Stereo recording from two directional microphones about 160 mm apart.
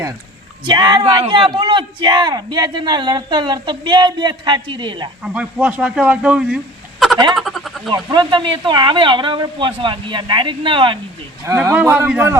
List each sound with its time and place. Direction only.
0.6 s speech: 25° right (ahead or behind)
5.2 s a man's voice: 5° right (ahead or behind)
7.3 s a sound: centre (ahead or behind)
7.9 s speech: 30° right (ahead or behind)
11.4 s speech: 20° right (ahead or behind)